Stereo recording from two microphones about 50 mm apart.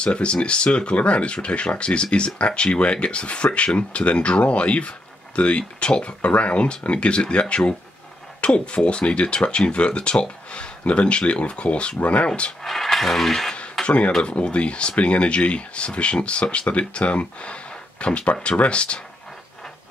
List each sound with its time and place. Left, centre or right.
0.0 s speech: left
12.6 s speech: centre
13.8 s speech: left